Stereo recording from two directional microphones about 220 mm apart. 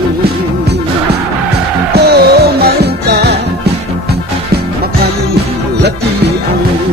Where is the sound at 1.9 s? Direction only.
45° right (ahead or behind).